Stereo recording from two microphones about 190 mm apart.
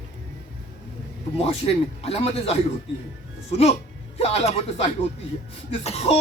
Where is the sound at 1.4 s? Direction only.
30° left (ahead or behind).